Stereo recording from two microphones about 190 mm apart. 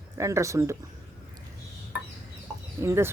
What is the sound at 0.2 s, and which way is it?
Speech, 15° right (ahead or behind).